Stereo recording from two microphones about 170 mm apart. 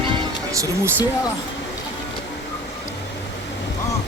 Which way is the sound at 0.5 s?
20° right (ahead or behind).